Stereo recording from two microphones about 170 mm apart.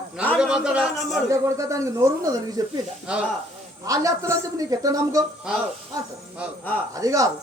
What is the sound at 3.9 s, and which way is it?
A woman's voice, 20° right (ahead or behind).